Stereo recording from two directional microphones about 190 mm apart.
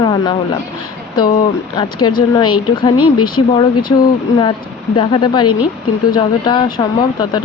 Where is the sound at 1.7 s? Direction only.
25° left (ahead or behind).